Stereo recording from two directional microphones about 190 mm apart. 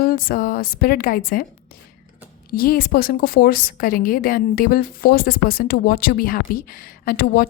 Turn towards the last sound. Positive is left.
turn(degrees=50)  # may be behind; listen again after turning